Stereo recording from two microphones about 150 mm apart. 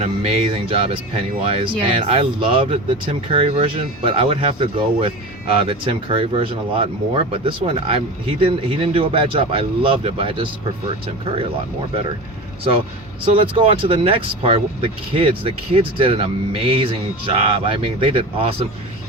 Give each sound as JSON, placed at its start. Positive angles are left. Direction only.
{"t": 0.0, "sound": "speech", "side_deg": -45}
{"t": 13.3, "sound": "speech", "side_deg": -35}